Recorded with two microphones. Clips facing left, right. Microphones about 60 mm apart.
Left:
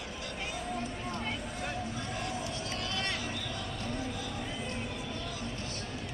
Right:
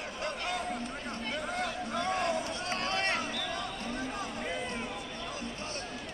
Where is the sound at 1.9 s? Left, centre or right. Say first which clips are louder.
Right 6 dB; right.